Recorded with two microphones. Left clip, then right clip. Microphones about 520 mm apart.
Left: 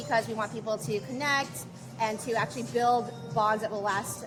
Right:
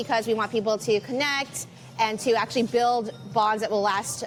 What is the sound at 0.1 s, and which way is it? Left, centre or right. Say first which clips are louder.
A woman's voice: right 4 dB; right.